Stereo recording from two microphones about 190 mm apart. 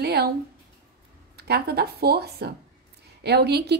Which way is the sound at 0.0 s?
55° right (ahead or behind).